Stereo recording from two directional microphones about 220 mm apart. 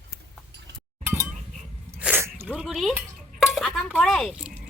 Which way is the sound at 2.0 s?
10° right (ahead or behind).